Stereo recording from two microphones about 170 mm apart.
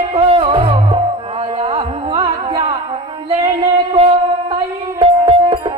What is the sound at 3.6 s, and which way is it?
Music, 30° right (ahead or behind).